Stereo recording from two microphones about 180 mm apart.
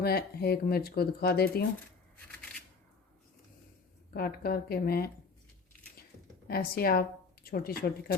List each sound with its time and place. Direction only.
0.0 s speech: 60° left (ahead or behind)
4.1 s speech: 55° left (ahead or behind)
6.5 s speech: 55° left (ahead or behind)